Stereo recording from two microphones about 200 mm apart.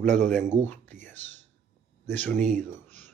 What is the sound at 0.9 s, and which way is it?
Speech, 35° right (ahead or behind).